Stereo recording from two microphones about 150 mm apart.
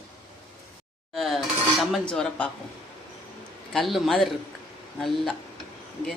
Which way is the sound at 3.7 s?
Centre (ahead or behind).